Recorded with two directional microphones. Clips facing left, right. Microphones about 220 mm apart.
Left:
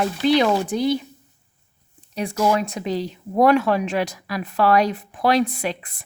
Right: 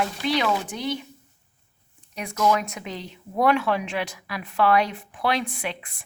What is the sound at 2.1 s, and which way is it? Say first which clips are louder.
Speech: left 3 dB; 30° left (ahead or behind).